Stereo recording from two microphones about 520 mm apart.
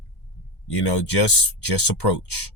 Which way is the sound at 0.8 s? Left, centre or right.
Left.